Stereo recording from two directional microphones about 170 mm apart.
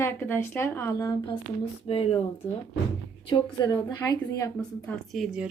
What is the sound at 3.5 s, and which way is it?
Speech, 25° left (ahead or behind).